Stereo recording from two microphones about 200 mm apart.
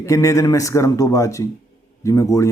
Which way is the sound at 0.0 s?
15° left (ahead or behind).